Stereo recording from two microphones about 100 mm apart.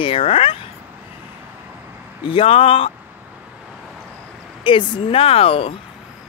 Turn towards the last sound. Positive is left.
turn(degrees=70)  # may be behind; listen again after turning